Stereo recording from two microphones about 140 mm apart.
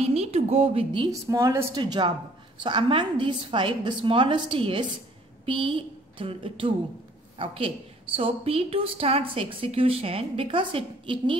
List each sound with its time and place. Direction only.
0.0 s a woman's voice: 45° right (ahead or behind)
1.2 s a woman's voice: 20° right (ahead or behind)
1.8 s a woman's voice: 35° right (ahead or behind)